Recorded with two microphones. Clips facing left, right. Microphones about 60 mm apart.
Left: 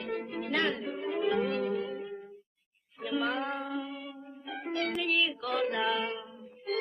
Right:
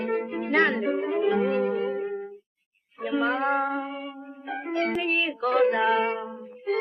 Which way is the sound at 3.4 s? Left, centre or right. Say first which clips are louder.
Right 10 dB; right.